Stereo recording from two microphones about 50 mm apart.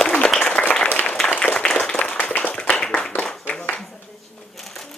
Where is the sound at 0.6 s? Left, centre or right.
Centre.